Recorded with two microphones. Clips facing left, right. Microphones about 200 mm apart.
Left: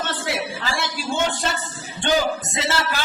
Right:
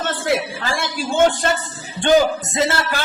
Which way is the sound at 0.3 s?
50° right (ahead or behind).